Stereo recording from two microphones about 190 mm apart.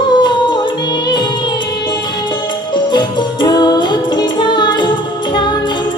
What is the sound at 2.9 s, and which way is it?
Music, 25° left (ahead or behind).